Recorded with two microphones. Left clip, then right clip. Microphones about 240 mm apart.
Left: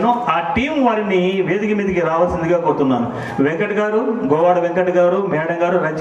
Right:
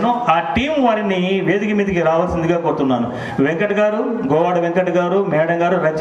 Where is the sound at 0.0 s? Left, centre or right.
Right.